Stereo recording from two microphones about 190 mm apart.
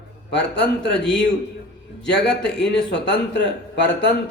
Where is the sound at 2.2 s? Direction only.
5° left (ahead or behind).